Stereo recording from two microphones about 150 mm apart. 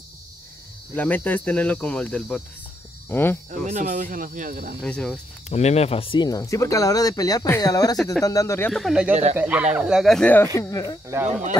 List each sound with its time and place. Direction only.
0.9 s speech: 10° left (ahead or behind)
3.4 s speech: 55° right (ahead or behind)
4.8 s speech: 5° left (ahead or behind)
5.5 s speech: 45° left (ahead or behind); by 8.7 s 15° left (ahead or behind)
8.7 s speech: centre (ahead or behind)
9.1 s speech: 50° right (ahead or behind)
9.4 s speech: 10° right (ahead or behind); by 11.0 s 20° left (ahead or behind)